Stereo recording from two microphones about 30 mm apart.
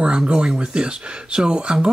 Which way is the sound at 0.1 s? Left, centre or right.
Right.